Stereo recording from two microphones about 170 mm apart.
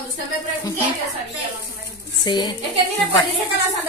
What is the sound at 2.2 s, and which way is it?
Speech, 25° left (ahead or behind).